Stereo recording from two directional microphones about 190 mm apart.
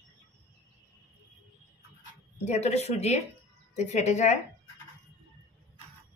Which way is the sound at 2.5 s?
35° left (ahead or behind).